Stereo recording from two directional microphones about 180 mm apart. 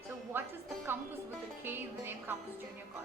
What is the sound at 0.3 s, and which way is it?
Music, 10° right (ahead or behind).